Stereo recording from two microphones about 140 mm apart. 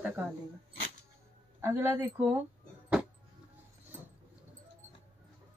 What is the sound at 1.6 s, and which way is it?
Speech, 20° right (ahead or behind).